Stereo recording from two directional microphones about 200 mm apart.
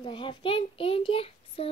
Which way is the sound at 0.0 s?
25° left (ahead or behind).